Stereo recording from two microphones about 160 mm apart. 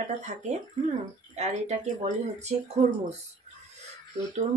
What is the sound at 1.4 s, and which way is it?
Speech, 45° right (ahead or behind).